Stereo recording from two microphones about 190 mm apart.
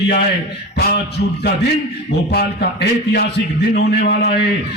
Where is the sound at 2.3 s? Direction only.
55° left (ahead or behind).